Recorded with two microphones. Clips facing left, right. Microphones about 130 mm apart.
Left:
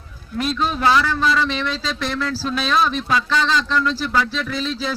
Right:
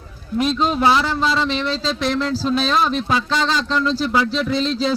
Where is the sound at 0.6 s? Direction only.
20° right (ahead or behind).